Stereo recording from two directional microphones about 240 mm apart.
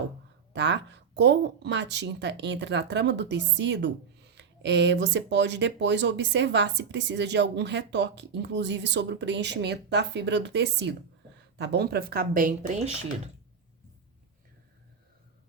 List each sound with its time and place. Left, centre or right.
0.5 s speech: right